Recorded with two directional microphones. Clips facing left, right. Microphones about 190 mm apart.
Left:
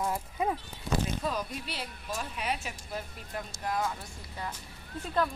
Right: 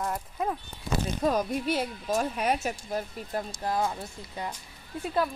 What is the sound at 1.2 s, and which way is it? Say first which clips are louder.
Speech: right 8 dB; 45° right (ahead or behind).